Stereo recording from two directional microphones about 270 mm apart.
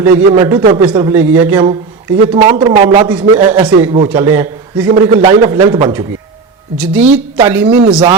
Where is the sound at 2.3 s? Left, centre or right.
Centre.